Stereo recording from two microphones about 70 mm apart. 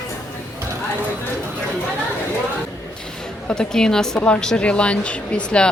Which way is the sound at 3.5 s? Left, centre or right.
Centre.